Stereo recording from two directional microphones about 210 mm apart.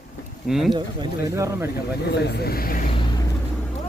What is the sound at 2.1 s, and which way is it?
Speech, 50° left (ahead or behind).